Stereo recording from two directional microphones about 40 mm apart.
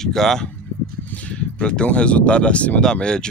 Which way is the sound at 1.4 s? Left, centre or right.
Left.